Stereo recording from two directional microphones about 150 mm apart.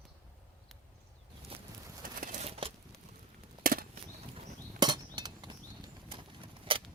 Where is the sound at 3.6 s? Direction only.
75° right (ahead or behind).